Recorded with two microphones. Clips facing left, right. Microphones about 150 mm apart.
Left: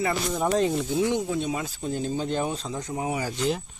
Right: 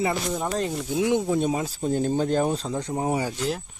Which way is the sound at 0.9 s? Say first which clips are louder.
Right 5 dB; 15° right (ahead or behind).